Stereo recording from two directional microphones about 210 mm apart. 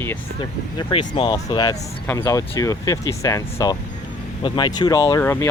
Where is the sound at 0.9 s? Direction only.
25° left (ahead or behind).